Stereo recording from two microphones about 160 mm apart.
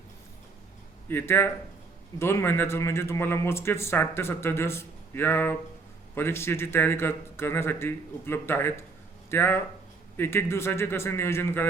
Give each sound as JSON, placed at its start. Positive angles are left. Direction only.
{"t": 1.0, "sound": "speech", "side_deg": 15}